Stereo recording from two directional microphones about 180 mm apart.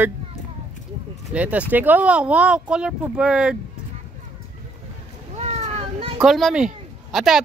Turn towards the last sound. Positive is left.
turn(degrees=0)  # may be behind; listen again after turning